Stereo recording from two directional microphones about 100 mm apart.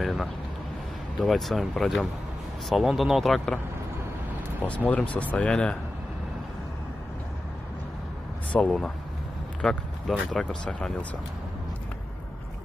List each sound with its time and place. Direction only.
0.0 s speech: centre (ahead or behind)
4.6 s speech: 15° left (ahead or behind)
8.5 s speech: 10° left (ahead or behind)